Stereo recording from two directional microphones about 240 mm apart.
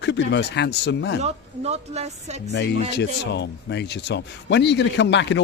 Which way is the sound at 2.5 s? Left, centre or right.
Left.